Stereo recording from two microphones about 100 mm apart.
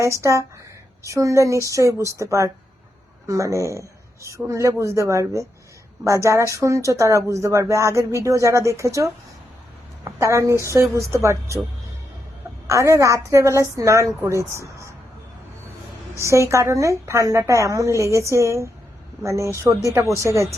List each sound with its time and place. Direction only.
0.0 s a woman's voice: 30° right (ahead or behind)
12.6 s a woman's voice: 30° right (ahead or behind)
16.2 s a woman's voice: 30° right (ahead or behind)